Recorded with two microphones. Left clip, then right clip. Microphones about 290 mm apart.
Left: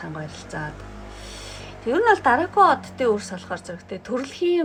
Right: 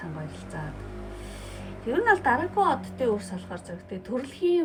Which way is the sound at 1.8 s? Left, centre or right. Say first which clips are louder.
Left 5 dB; centre.